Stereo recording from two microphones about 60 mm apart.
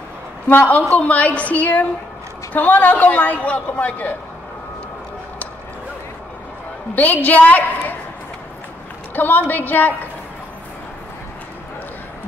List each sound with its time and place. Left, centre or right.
0.5 s a man's voice: left
7.0 s a man's voice: left
9.1 s a woman's voice: left